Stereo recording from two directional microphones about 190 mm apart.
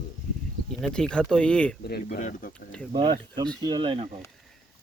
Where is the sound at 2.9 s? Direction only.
25° right (ahead or behind).